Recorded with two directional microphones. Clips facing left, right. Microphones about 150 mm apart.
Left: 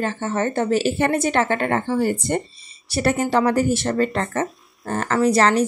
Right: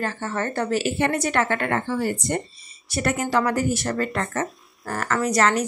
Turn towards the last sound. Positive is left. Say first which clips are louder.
# left 4 dB
turn(degrees=30)  # may be behind; listen again after turning